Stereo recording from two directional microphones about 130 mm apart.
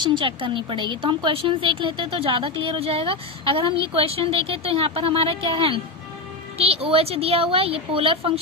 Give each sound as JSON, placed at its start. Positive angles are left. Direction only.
{"t": 0.0, "sound": "a woman's voice", "side_deg": -40}